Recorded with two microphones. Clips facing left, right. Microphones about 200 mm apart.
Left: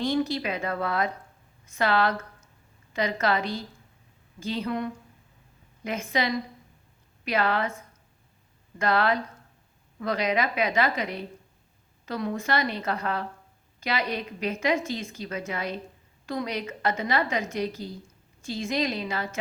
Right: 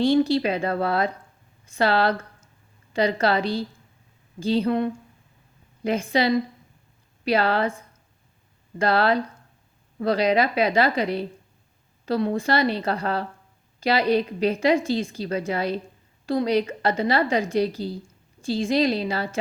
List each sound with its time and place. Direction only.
0.0 s a woman's voice: 30° right (ahead or behind)
8.8 s a woman's voice: 30° right (ahead or behind)